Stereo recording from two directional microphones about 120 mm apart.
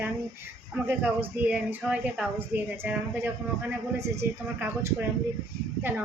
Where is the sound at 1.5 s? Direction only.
10° right (ahead or behind).